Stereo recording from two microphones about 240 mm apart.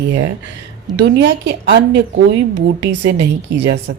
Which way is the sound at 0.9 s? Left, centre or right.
Right.